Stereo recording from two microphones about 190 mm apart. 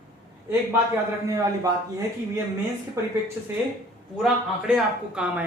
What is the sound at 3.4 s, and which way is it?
Speech, 10° right (ahead or behind).